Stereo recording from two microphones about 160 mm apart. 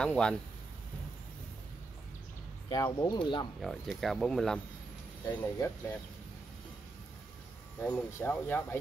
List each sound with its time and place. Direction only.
0.0 s speech: 5° left (ahead or behind)
2.7 s speech: 25° left (ahead or behind)
3.6 s speech: centre (ahead or behind)
5.2 s speech: 15° left (ahead or behind)
7.8 s speech: 10° left (ahead or behind)